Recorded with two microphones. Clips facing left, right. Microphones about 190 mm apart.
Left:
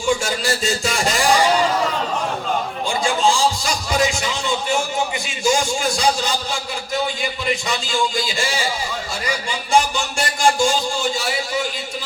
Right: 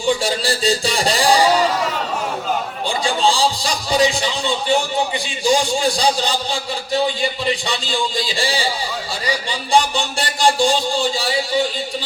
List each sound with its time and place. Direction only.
0.2 s a man's voice: 35° right (ahead or behind)
2.8 s a man's voice: 35° right (ahead or behind)